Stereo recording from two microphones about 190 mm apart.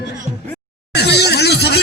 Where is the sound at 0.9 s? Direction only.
60° left (ahead or behind).